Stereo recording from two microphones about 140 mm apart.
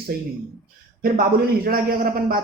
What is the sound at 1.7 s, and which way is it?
Speech, 90° right.